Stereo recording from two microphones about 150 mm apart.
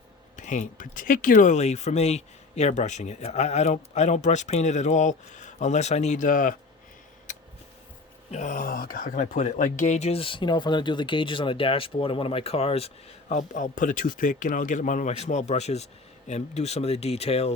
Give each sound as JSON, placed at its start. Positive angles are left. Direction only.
{"t": 0.3, "sound": "speech", "side_deg": 55}
{"t": 8.3, "sound": "speech", "side_deg": 55}
{"t": 13.2, "sound": "speech", "side_deg": 60}